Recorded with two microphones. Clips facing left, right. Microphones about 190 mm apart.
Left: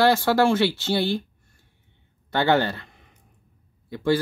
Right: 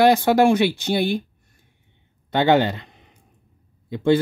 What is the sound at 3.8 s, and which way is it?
Speech, 20° right (ahead or behind).